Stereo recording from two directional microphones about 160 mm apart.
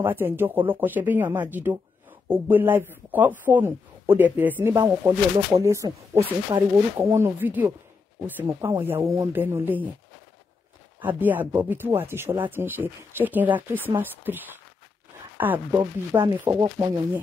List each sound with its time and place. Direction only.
0.0 s speech: 15° right (ahead or behind)
5.0 s speech: 20° right (ahead or behind)
11.0 s speech: 10° right (ahead or behind)
15.7 s speech: 20° right (ahead or behind)